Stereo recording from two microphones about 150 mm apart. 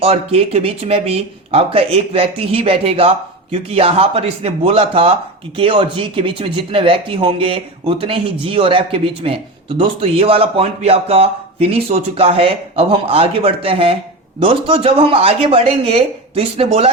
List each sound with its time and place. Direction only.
0.0 s speech: 40° right (ahead or behind)